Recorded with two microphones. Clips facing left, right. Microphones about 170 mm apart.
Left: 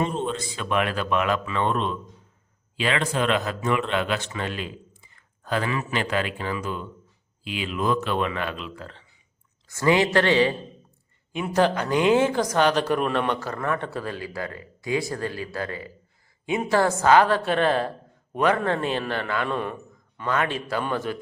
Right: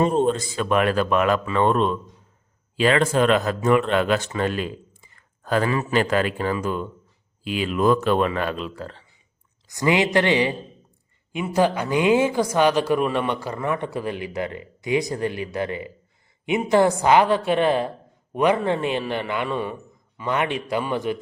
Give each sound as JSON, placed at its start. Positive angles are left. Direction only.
{"t": 0.0, "sound": "a man's voice", "side_deg": -45}
{"t": 9.6, "sound": "speech", "side_deg": -15}
{"t": 19.5, "sound": "a man's voice", "side_deg": -5}